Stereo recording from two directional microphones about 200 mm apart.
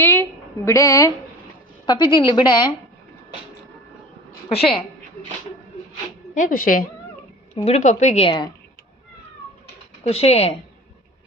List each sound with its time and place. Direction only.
0.0 s a woman's voice: 10° left (ahead or behind)
4.4 s a woman's voice: 30° left (ahead or behind)
6.3 s speech: 40° left (ahead or behind)
7.5 s a woman's voice: 30° left (ahead or behind)
10.0 s a woman's voice: 30° left (ahead or behind)